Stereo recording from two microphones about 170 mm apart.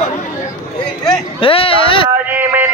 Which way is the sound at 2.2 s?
10° right (ahead or behind).